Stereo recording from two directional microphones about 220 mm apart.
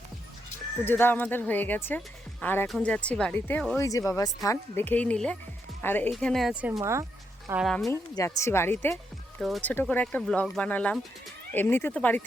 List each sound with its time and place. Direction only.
0.9 s speech: 10° left (ahead or behind); by 7.6 s 15° right (ahead or behind)
7.6 s speech: centre (ahead or behind)
7.9 s speech: 15° left (ahead or behind)